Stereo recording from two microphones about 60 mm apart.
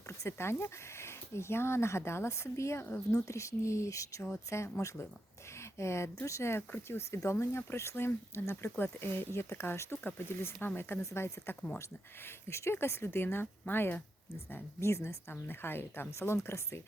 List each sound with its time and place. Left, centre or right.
0.2 s speech: left
4.4 s speech: left
7.2 s speech: left
10.0 s speech: left
11.0 s speech: left
14.5 s speech: left